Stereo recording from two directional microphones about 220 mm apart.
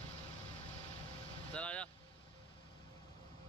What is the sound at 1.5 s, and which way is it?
Vehicle, 5° left (ahead or behind).